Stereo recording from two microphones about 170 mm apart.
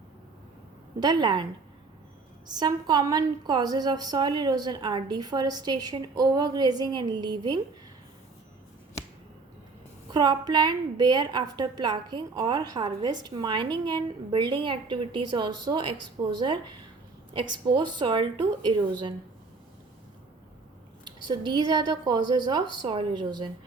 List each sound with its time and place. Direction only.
0.9 s a woman's voice: 25° right (ahead or behind)
2.5 s a woman's voice: 25° right (ahead or behind)
10.1 s a woman's voice: 25° right (ahead or behind)
21.0 s a woman's voice: 25° right (ahead or behind)